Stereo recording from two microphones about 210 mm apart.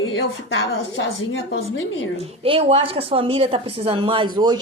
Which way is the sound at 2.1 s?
25° right (ahead or behind).